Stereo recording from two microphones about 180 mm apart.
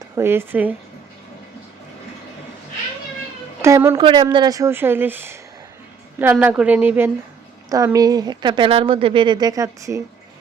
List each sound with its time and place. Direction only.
0.2 s speech: 10° right (ahead or behind)
3.6 s speech: 15° right (ahead or behind)
3.9 s speech: 25° right (ahead or behind); by 7.1 s 10° right (ahead or behind)
7.9 s speech: 20° right (ahead or behind)